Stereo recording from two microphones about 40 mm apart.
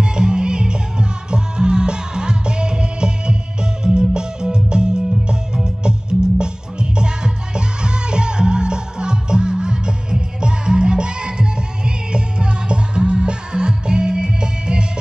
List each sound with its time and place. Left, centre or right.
0.0 s music: right